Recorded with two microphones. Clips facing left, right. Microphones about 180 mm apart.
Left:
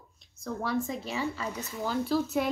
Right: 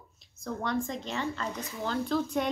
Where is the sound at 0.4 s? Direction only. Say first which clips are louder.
Left 1 dB; 5° left (ahead or behind).